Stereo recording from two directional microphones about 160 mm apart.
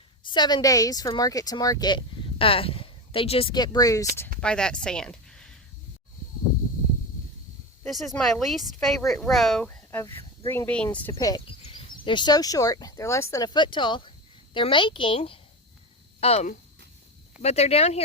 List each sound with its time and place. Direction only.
0.3 s speech: 25° left (ahead or behind)
4.4 s speech: 5° left (ahead or behind)
7.9 s a woman's voice: centre (ahead or behind); by 15.2 s 30° left (ahead or behind)
16.2 s a woman's voice: 45° left (ahead or behind)